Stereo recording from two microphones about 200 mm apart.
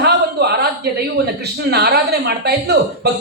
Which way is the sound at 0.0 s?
55° right (ahead or behind).